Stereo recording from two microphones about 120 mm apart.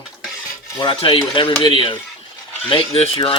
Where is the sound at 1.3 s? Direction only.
45° left (ahead or behind).